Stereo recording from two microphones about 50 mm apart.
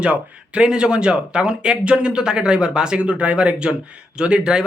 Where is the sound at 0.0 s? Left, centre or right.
Right.